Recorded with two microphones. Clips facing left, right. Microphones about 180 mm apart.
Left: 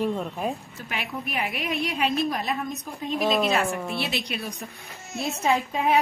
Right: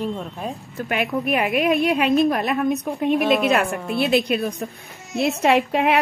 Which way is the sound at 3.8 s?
Centre (ahead or behind).